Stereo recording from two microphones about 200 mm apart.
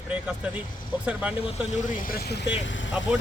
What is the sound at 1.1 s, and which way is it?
Speech, 5° right (ahead or behind).